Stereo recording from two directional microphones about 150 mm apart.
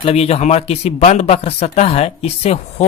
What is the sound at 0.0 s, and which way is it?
Speech, 45° left (ahead or behind).